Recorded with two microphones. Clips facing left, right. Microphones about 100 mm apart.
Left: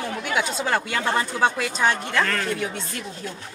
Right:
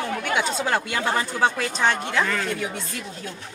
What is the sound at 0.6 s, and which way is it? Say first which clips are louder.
Speech: even; 5° right (ahead or behind).